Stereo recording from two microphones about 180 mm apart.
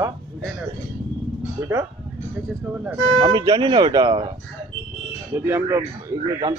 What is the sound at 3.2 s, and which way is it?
A man's voice, 25° right (ahead or behind).